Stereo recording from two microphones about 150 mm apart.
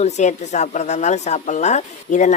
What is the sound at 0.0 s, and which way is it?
Speech, 50° left (ahead or behind).